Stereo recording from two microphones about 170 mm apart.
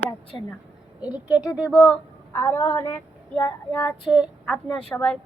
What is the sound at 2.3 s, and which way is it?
Speech, 15° left (ahead or behind).